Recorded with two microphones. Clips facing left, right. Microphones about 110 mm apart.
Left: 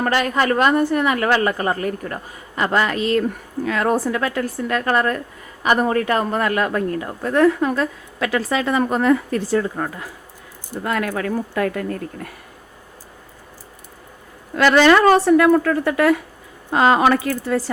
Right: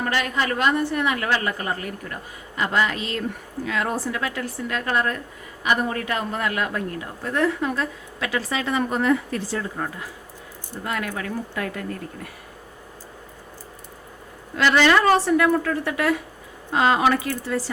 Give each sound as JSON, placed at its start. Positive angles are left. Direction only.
{"t": 0.0, "sound": "a woman's voice", "side_deg": 45}
{"t": 10.8, "sound": "a woman's voice", "side_deg": 50}
{"t": 14.5, "sound": "a woman's voice", "side_deg": 50}